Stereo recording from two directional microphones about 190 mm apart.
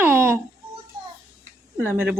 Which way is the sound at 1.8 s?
10° right (ahead or behind).